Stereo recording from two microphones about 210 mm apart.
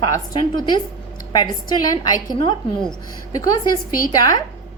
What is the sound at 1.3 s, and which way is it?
A woman's voice, 20° left (ahead or behind).